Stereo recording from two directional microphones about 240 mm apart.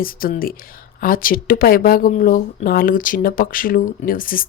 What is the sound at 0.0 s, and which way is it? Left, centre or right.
A woman's voice, left.